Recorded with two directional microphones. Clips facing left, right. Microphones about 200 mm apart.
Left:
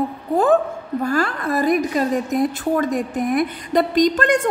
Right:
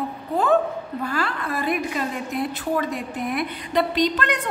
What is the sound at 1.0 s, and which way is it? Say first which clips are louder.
A woman's voice: left 6 dB; 45° left (ahead or behind).